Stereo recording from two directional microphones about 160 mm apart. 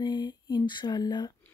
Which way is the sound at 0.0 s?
25° left (ahead or behind).